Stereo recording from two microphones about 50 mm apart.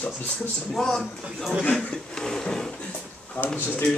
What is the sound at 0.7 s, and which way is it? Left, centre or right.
Speech, centre.